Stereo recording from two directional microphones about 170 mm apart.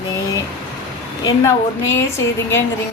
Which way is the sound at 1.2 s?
15° left (ahead or behind).